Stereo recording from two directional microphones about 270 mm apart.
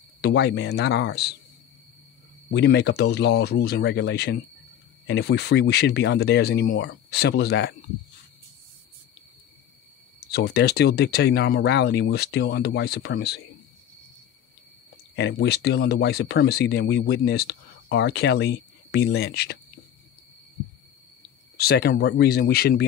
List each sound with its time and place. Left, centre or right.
0.2 s speech: left
2.5 s speech: left
10.2 s speech: left
15.1 s speech: left
21.5 s speech: left